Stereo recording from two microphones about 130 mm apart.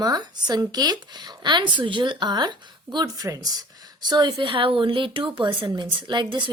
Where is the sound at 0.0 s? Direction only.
30° right (ahead or behind).